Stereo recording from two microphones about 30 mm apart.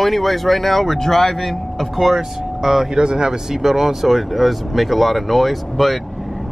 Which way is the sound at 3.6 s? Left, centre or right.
Centre.